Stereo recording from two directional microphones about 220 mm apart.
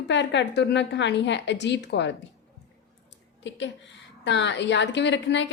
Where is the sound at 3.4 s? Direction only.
55° left (ahead or behind).